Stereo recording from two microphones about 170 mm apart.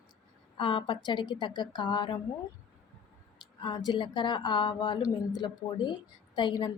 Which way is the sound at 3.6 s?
25° left (ahead or behind).